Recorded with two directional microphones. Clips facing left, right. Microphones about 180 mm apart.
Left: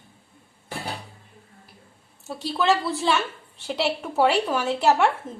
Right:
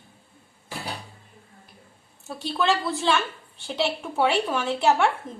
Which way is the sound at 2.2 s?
Centre (ahead or behind).